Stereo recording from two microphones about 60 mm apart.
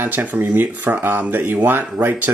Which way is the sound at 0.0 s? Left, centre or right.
Right.